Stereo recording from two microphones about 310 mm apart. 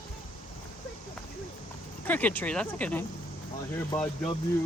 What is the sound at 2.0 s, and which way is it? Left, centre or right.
Speech, centre.